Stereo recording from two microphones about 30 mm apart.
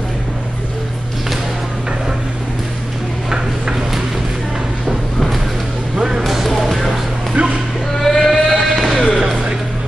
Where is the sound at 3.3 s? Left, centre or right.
Centre.